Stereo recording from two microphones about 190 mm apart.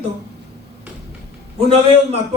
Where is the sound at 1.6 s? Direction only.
30° right (ahead or behind).